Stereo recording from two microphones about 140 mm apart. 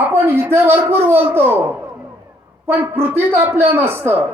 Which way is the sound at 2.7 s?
15° right (ahead or behind).